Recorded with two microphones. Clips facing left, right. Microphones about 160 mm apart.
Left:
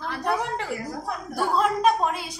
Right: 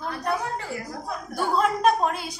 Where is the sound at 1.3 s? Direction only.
Centre (ahead or behind).